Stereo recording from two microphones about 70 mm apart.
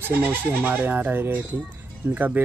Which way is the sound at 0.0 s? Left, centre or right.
Right.